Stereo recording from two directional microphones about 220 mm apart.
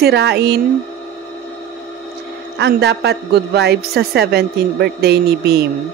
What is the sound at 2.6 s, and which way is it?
A woman's voice, 50° right (ahead or behind).